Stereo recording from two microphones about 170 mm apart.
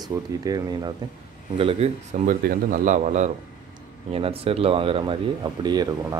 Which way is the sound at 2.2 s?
50° right (ahead or behind).